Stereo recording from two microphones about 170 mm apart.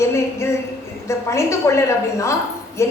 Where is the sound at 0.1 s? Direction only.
15° left (ahead or behind).